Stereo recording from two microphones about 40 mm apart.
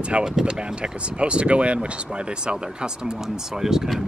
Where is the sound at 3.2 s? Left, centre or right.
Centre.